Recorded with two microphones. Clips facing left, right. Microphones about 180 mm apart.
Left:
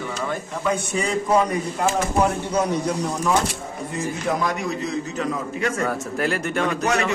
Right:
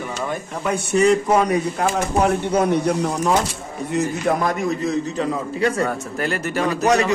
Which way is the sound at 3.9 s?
55° right (ahead or behind).